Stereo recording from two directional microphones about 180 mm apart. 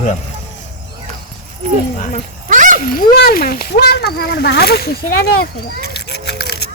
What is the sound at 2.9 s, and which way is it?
Speech, 55° left (ahead or behind).